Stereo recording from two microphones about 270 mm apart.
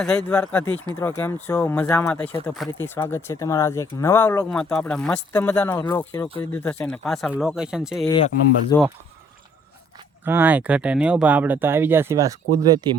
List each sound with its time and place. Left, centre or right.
0.0 s speech: centre
8.0 s speech: centre
10.2 s speech: centre